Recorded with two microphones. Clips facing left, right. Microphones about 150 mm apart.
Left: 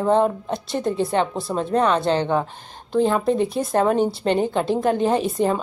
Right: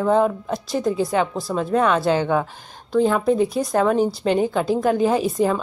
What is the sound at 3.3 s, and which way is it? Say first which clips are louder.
Speech: right 2 dB; 5° right (ahead or behind).